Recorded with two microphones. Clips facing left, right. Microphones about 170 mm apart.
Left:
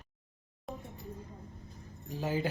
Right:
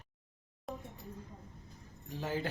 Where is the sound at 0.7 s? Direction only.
Centre (ahead or behind).